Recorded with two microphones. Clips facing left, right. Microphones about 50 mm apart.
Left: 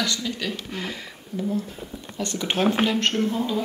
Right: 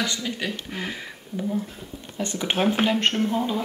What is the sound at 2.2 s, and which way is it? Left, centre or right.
Speech, centre.